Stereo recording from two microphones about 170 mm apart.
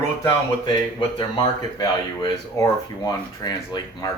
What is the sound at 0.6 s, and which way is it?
Speech, 25° left (ahead or behind).